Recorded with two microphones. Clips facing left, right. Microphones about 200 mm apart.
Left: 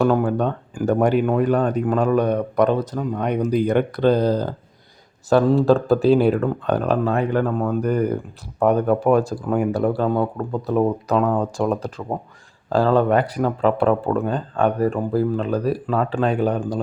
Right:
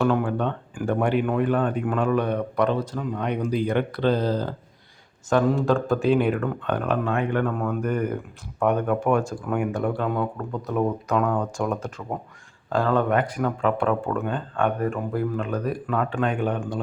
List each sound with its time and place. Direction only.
0.0 s speech: 40° left (ahead or behind)